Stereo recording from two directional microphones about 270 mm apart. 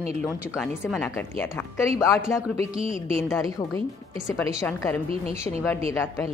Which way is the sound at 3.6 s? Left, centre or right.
Centre.